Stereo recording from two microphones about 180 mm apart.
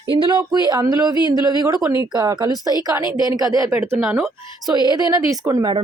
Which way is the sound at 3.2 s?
20° right (ahead or behind).